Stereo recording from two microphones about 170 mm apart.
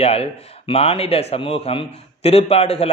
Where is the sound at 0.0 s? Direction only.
35° left (ahead or behind).